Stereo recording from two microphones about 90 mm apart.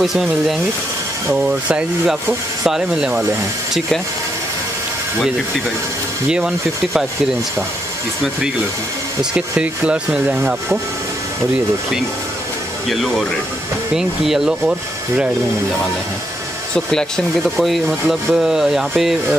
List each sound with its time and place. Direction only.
0.0 s speech: centre (ahead or behind)
1.5 s speech: 15° right (ahead or behind)
6.2 s speech: 10° right (ahead or behind)
9.2 s speech: 10° right (ahead or behind)
12.9 s speech: centre (ahead or behind)
17.6 s speech: centre (ahead or behind)